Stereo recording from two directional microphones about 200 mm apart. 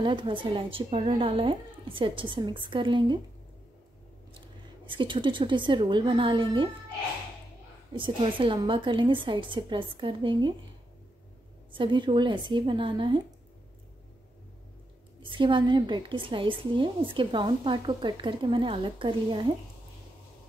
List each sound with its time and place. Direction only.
0.0 s a woman's voice: 25° right (ahead or behind)
4.8 s a woman's voice: 25° right (ahead or behind)
8.0 s a woman's voice: 25° right (ahead or behind)
11.7 s a woman's voice: 25° right (ahead or behind)
15.2 s a woman's voice: 25° right (ahead or behind)